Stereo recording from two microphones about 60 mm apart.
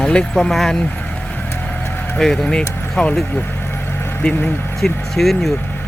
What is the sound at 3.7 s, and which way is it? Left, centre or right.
Vehicle, left.